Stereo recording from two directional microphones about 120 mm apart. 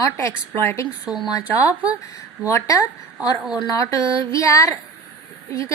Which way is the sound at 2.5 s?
25° left (ahead or behind).